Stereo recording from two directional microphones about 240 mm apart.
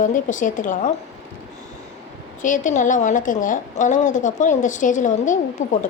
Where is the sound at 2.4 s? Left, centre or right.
Left.